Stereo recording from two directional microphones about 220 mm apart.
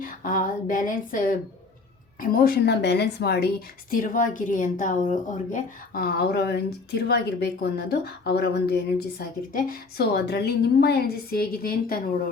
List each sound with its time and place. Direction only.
0.0 s a woman's voice: 40° left (ahead or behind)